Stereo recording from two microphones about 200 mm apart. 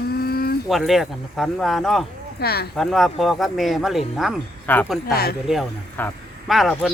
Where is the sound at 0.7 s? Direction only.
Centre (ahead or behind).